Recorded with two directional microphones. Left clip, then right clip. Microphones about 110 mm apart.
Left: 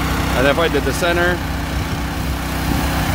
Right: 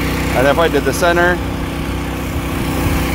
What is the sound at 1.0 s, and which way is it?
Speech, 5° right (ahead or behind).